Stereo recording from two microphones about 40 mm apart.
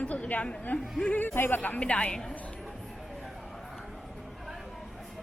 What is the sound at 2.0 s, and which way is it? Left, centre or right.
Speech, centre.